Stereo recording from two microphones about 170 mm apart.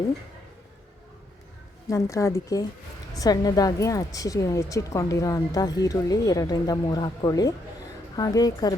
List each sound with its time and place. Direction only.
1.9 s a woman's voice: 20° left (ahead or behind)